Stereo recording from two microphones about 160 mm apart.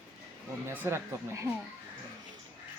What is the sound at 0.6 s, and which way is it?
Speech, 15° right (ahead or behind).